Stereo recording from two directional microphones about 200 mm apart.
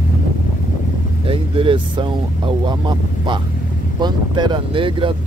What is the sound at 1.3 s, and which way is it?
Speech, 25° right (ahead or behind).